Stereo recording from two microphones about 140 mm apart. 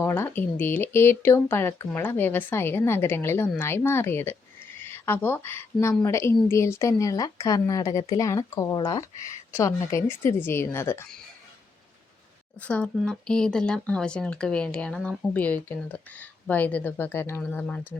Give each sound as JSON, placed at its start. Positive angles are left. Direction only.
{"t": 0.0, "sound": "a woman's voice", "side_deg": 15}
{"t": 12.5, "sound": "speech", "side_deg": 10}